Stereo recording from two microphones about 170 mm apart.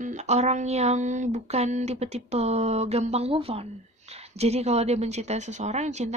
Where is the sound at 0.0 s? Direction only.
45° right (ahead or behind).